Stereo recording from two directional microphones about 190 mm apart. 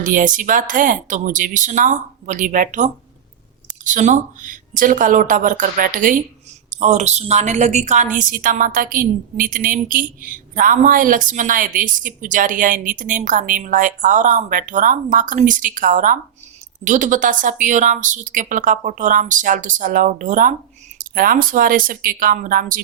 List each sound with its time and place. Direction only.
0.0 s a woman's voice: 45° right (ahead or behind)